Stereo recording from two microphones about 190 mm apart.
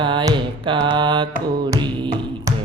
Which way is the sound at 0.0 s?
25° right (ahead or behind).